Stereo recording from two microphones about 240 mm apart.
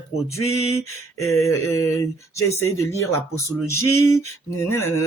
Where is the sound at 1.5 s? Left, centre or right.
Centre.